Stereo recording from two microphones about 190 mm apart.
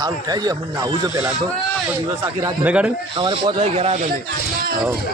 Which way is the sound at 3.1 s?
25° right (ahead or behind).